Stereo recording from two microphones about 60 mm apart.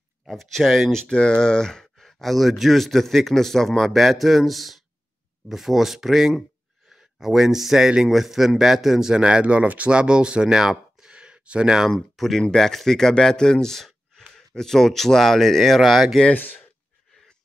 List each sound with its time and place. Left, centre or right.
0.2 s speech: centre
0.9 s a man's voice: centre
11.9 s speech: centre
16.3 s speech: left